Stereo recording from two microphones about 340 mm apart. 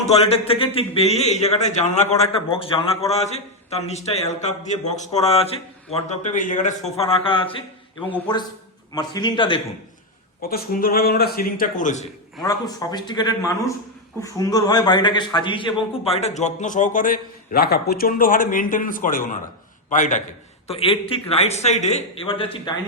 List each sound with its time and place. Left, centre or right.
0.4 s a man's voice: centre
10.4 s a man's voice: left
12.5 s a man's voice: centre